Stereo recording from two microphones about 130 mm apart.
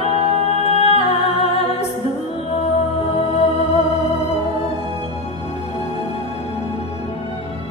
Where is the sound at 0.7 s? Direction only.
50° left (ahead or behind).